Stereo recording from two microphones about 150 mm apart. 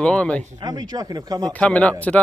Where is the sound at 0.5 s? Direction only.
25° right (ahead or behind).